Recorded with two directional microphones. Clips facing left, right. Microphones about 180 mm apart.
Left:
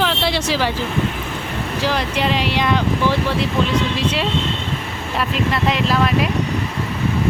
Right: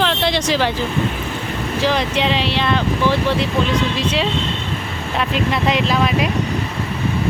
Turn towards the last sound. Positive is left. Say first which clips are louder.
# right 1 dB
turn(degrees=0)  # may be behind; listen again after turning